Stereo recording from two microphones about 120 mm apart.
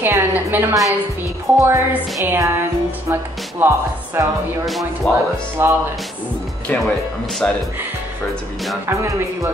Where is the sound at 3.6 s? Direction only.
15° right (ahead or behind).